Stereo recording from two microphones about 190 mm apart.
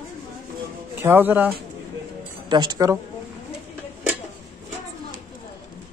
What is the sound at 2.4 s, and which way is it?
Speech, 25° right (ahead or behind).